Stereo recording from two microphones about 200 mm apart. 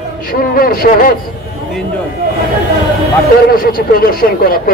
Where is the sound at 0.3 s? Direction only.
45° left (ahead or behind).